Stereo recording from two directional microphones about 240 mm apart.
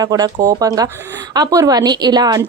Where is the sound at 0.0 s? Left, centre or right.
Centre.